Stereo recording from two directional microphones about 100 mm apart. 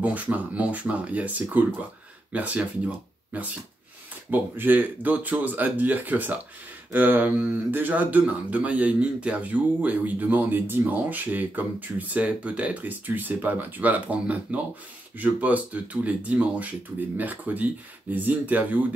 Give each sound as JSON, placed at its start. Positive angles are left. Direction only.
{"t": 0.0, "sound": "speech", "side_deg": -15}